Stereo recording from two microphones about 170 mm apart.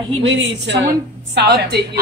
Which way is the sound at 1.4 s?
75° right (ahead or behind).